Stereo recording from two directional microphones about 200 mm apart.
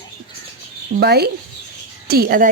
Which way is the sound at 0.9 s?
55° right (ahead or behind).